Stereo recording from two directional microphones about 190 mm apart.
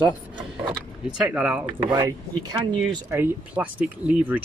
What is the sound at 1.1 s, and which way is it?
Speech, 5° right (ahead or behind).